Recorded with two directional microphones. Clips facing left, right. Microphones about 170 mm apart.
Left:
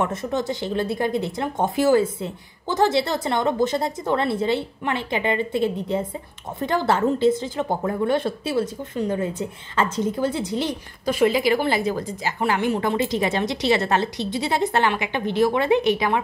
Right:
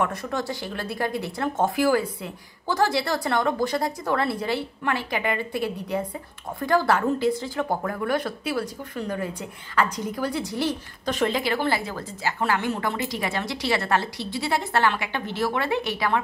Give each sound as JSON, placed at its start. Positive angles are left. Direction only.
{"t": 0.0, "sound": "speech", "side_deg": 25}
{"t": 11.1, "sound": "speech", "side_deg": 10}